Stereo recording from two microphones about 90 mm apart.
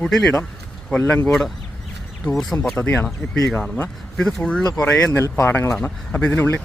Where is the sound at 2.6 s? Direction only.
5° left (ahead or behind).